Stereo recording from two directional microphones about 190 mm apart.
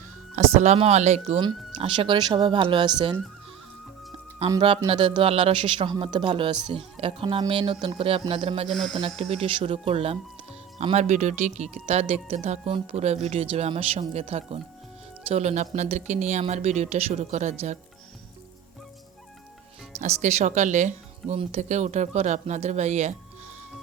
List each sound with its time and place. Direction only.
0.3 s speech: 35° right (ahead or behind)
4.4 s speech: 25° right (ahead or behind)
8.7 s speech: centre (ahead or behind)
9.0 s speech: 35° right (ahead or behind)
20.0 s speech: 35° right (ahead or behind)